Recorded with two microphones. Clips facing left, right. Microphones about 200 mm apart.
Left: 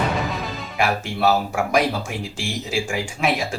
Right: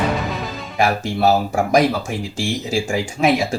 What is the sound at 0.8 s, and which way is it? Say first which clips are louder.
Speech: right 3 dB; 40° right (ahead or behind).